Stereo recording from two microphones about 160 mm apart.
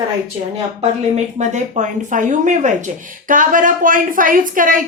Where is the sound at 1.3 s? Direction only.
45° right (ahead or behind).